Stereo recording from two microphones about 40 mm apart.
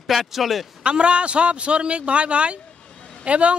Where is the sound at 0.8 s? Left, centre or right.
Right.